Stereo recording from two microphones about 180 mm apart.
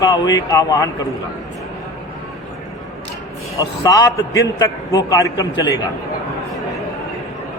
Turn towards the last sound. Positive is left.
turn(degrees=20)  # may be behind; listen again after turning